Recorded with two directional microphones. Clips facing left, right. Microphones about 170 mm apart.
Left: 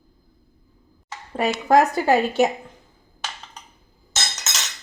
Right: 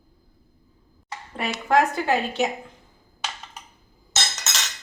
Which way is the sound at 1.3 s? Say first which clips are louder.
Left 4 dB; 40° left (ahead or behind).